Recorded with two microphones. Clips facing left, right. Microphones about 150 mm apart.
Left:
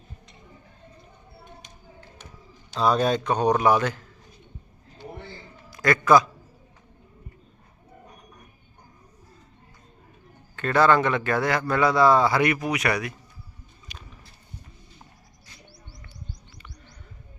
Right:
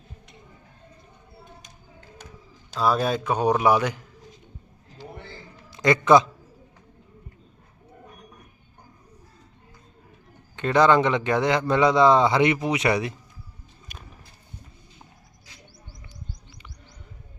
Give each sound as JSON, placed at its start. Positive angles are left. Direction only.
{"t": 2.7, "sound": "a man's voice", "side_deg": -5}
{"t": 5.7, "sound": "a man's voice", "side_deg": -20}
{"t": 10.5, "sound": "a man's voice", "side_deg": -20}
{"t": 13.9, "sound": "a sound", "side_deg": -50}